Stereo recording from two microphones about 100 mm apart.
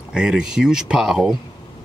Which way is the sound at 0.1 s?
10° right (ahead or behind).